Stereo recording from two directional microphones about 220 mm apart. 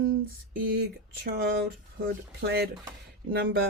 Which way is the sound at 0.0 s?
45° right (ahead or behind).